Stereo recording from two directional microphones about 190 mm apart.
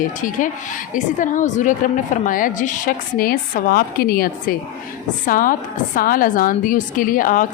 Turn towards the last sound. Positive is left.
turn(degrees=45)  # may be behind; listen again after turning